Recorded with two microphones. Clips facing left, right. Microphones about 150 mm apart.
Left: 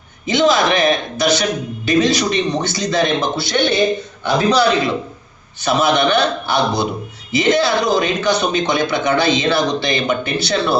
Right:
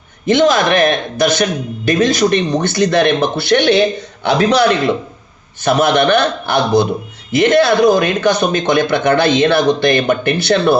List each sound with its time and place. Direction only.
0.3 s a man's voice: 50° right (ahead or behind); by 4.6 s 70° right (ahead or behind)
5.6 s a man's voice: 55° right (ahead or behind)